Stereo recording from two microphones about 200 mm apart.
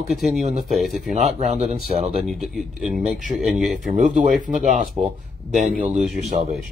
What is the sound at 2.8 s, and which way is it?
Speech, 40° right (ahead or behind).